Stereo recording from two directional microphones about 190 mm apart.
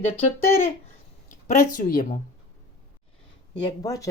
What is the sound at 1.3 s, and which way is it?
Speech, 45° left (ahead or behind).